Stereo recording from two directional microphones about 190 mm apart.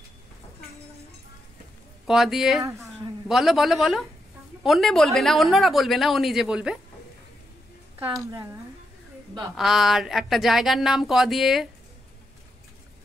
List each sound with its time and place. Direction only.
2.0 s speech: centre (ahead or behind)
8.0 s a woman's voice: 15° right (ahead or behind)
9.6 s speech: centre (ahead or behind)